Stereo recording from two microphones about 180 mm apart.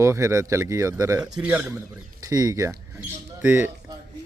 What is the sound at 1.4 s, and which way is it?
Speech, 5° right (ahead or behind).